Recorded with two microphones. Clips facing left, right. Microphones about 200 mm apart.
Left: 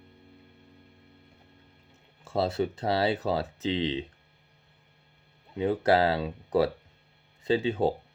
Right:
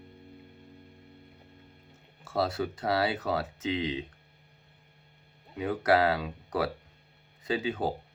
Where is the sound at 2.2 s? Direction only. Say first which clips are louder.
Left 2 dB; 25° left (ahead or behind).